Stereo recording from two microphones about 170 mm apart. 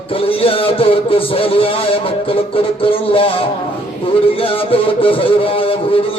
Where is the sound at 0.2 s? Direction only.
35° left (ahead or behind).